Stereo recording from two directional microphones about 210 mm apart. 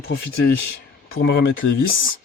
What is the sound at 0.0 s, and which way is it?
Speech, 50° left (ahead or behind).